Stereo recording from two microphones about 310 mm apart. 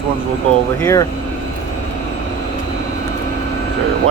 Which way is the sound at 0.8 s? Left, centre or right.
Centre.